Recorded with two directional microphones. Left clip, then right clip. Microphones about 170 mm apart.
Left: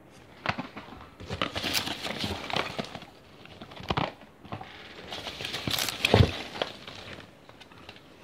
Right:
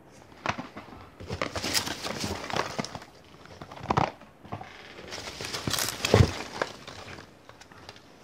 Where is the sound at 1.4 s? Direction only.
Centre (ahead or behind).